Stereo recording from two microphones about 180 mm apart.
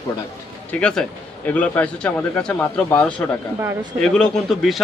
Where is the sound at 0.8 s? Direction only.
5° left (ahead or behind).